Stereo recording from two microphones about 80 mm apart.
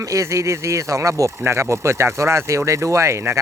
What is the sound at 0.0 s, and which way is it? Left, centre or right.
Speech, right.